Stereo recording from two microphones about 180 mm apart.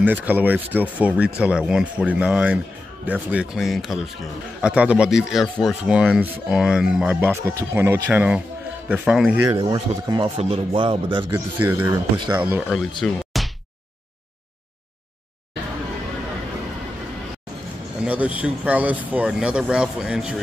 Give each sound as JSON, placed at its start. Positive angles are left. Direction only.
{"t": 0.0, "sound": "speech", "side_deg": -10}
{"t": 9.5, "sound": "a man's voice", "side_deg": -25}
{"t": 11.5, "sound": "speech", "side_deg": -10}
{"t": 12.7, "sound": "speech", "side_deg": 0}
{"t": 18.0, "sound": "speech", "side_deg": -5}